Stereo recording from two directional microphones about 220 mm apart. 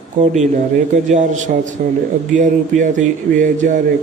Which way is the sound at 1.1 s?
35° right (ahead or behind).